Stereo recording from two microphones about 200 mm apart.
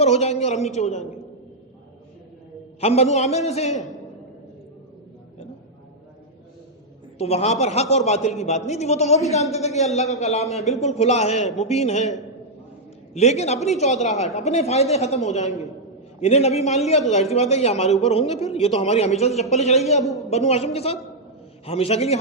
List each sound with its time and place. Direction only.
0.0 s a man's voice: 35° left (ahead or behind)
2.8 s a man's voice: 30° left (ahead or behind)
7.2 s a man's voice: 30° left (ahead or behind)
13.1 s a man's voice: 35° left (ahead or behind)
20.0 s a man's voice: centre (ahead or behind)
20.3 s a man's voice: 30° left (ahead or behind)